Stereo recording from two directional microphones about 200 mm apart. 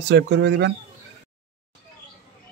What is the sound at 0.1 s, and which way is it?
Speech, 60° right (ahead or behind).